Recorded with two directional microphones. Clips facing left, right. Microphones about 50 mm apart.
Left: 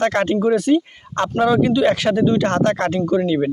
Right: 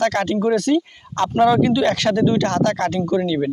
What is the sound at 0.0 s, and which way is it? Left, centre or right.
Speech, left.